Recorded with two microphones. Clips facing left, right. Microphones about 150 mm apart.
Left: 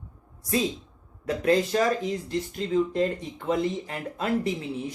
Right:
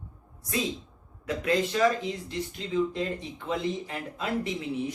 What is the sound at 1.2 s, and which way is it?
Speech, 40° left (ahead or behind).